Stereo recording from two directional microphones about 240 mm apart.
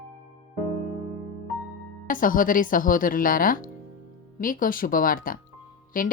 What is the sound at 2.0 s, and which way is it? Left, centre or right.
Speech, left.